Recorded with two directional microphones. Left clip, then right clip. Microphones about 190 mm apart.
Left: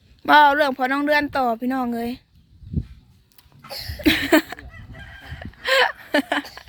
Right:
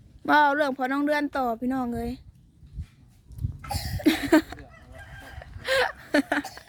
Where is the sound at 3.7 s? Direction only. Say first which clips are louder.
Left 1 dB; 65° right (ahead or behind).